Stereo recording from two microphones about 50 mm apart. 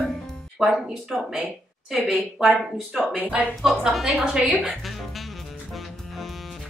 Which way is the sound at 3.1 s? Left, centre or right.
Right.